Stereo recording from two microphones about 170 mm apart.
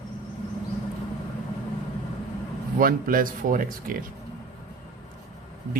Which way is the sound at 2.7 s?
55° right (ahead or behind).